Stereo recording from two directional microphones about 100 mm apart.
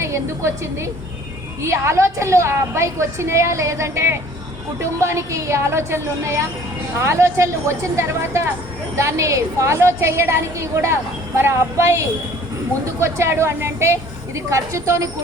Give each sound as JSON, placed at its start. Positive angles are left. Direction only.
{"t": 0.0, "sound": "a woman's voice", "side_deg": -30}